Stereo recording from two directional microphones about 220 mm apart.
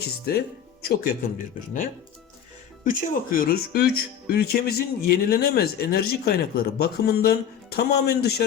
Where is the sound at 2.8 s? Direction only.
40° left (ahead or behind).